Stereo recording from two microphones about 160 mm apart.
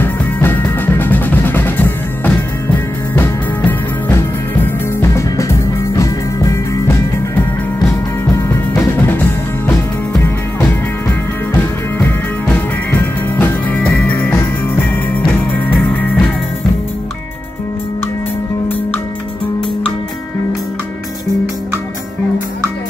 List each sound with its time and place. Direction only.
0.0 s music: 10° left (ahead or behind)
9.0 s music: 15° left (ahead or behind)
11.1 s music: 10° left (ahead or behind)